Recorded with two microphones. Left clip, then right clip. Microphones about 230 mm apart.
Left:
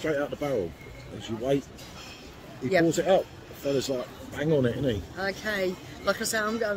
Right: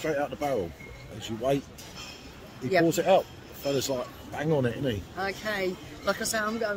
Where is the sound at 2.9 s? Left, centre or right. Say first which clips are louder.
Right 2 dB; right.